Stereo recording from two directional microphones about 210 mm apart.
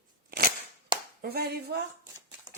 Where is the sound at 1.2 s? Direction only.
50° right (ahead or behind).